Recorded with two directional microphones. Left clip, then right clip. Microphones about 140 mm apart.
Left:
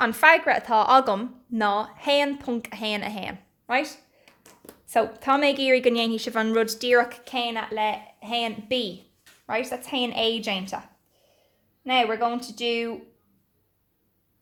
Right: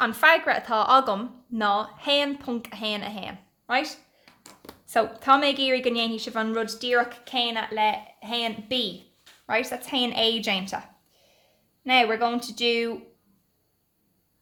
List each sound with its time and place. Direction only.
0.0 s a woman's voice: 35° left (ahead or behind); by 7.2 s 60° left (ahead or behind)
7.3 s speech: 35° left (ahead or behind)
9.5 s a woman's voice: 20° left (ahead or behind)